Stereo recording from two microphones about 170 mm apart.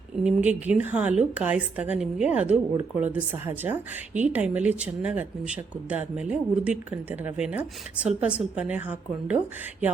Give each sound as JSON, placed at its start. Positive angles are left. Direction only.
{"t": 0.3, "sound": "a woman's voice", "side_deg": -5}